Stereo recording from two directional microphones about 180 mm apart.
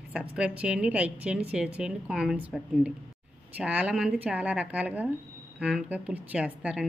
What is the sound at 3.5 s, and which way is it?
A woman's voice, 5° right (ahead or behind).